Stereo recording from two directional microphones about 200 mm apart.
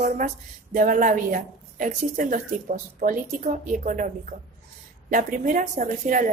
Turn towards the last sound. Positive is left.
turn(degrees=-40)  # may be behind; listen again after turning